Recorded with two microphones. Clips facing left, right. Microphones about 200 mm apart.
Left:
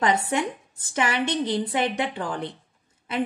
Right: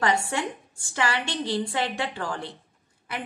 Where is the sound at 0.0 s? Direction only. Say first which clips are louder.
Left 2 dB; 20° left (ahead or behind).